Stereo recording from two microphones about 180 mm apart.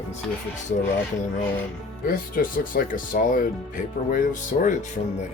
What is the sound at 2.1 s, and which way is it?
Speech, 50° left (ahead or behind).